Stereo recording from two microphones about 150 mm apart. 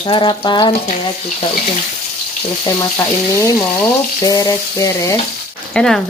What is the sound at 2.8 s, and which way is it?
Speech, 20° left (ahead or behind).